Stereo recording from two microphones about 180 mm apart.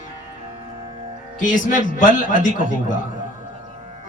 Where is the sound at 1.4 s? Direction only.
45° left (ahead or behind).